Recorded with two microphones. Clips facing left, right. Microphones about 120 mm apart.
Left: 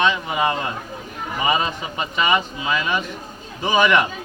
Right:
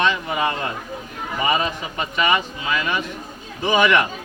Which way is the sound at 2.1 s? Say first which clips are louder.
Even; 20° left (ahead or behind).